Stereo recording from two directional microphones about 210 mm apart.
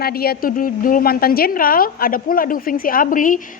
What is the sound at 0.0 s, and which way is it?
A woman's voice, 45° left (ahead or behind).